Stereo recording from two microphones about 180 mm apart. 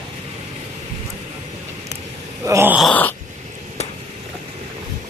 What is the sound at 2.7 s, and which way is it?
Groan, 5° left (ahead or behind).